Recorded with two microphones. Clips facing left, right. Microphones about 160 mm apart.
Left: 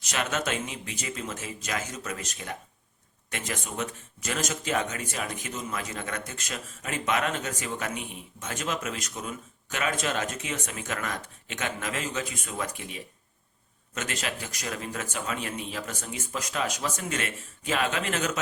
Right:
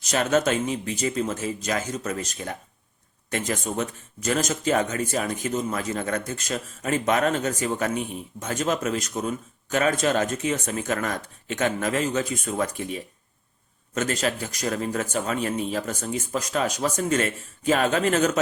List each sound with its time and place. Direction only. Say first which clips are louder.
0.0 s speech: right 8 dB; 35° right (ahead or behind)